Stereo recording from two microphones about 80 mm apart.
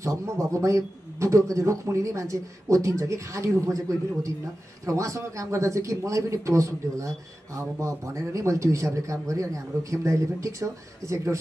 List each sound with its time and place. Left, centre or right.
0.0 s speech: right